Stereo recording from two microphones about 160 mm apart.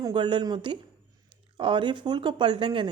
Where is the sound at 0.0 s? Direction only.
30° right (ahead or behind).